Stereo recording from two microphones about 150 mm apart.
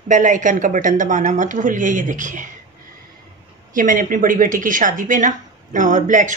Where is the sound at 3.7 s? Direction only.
65° right (ahead or behind).